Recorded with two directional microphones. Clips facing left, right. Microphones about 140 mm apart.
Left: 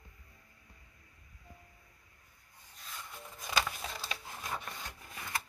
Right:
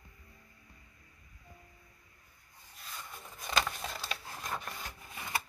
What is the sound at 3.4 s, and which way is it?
Wood, centre (ahead or behind).